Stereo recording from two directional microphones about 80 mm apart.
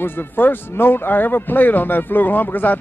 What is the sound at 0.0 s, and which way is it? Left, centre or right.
Speech, left.